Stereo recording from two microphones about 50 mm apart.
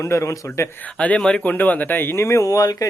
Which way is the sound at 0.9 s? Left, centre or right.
Left.